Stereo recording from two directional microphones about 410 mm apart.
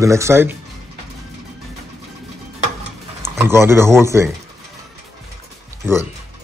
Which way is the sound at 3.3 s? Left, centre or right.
Centre.